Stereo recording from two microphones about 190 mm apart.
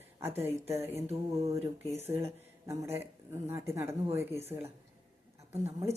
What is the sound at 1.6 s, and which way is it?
Speech, 35° right (ahead or behind).